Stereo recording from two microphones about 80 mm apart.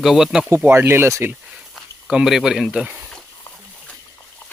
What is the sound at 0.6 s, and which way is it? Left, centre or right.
Speech, right.